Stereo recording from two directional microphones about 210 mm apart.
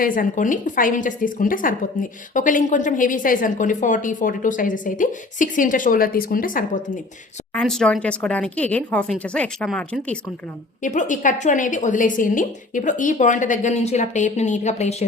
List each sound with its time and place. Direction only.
0.0 s a woman's voice: 40° left (ahead or behind)
7.5 s speech: 5° left (ahead or behind)
10.8 s a woman's voice: 35° left (ahead or behind)